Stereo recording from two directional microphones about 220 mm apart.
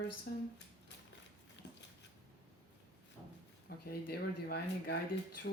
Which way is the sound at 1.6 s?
50° left (ahead or behind).